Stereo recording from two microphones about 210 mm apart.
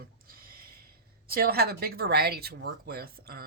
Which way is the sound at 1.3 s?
45° right (ahead or behind).